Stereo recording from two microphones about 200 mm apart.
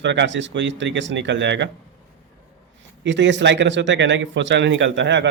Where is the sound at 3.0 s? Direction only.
60° right (ahead or behind).